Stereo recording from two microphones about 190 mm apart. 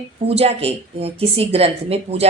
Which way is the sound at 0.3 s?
30° right (ahead or behind).